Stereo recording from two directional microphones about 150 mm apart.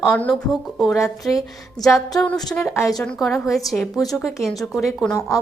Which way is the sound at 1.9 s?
20° left (ahead or behind).